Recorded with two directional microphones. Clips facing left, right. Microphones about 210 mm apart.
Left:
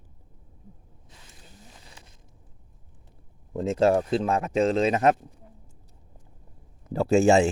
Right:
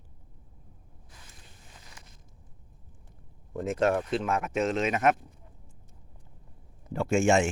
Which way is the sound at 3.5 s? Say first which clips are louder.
Left 5 dB; 25° left (ahead or behind).